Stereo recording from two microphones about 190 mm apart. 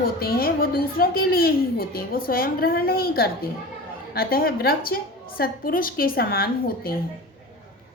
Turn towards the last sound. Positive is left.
turn(degrees=50)  # may be behind; listen again after turning